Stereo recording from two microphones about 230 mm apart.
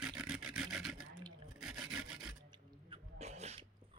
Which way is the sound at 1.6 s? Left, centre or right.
Centre.